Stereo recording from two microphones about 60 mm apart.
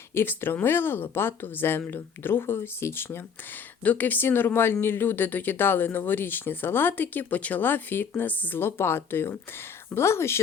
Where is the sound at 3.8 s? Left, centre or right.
Left.